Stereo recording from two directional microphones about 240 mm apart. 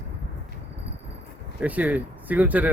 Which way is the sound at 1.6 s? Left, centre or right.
Centre.